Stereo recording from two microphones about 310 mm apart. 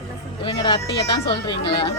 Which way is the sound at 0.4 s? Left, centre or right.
Centre.